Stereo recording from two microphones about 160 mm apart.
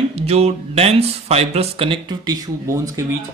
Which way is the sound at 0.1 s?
40° right (ahead or behind).